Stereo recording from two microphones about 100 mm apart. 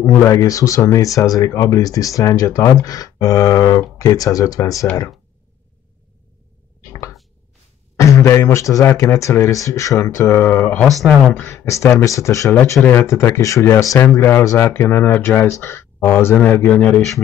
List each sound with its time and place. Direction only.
0.0 s speech: 30° left (ahead or behind)
6.9 s chopping: 30° left (ahead or behind)
8.0 s speech: 30° left (ahead or behind)